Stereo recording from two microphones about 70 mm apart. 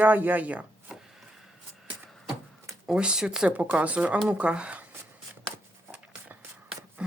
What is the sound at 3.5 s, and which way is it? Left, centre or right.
Speech, right.